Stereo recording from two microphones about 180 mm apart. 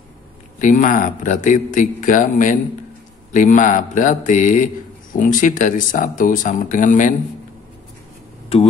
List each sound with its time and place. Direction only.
0.6 s speech: 45° left (ahead or behind)